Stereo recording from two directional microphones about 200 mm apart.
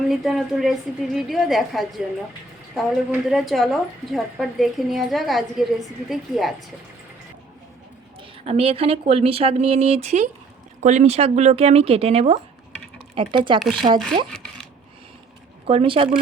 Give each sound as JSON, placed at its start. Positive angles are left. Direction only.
{"t": 0.1, "sound": "a woman's voice", "side_deg": 0}
{"t": 8.4, "sound": "speech", "side_deg": -30}
{"t": 14.3, "sound": "a sound", "side_deg": 5}
{"t": 15.6, "sound": "speech", "side_deg": -25}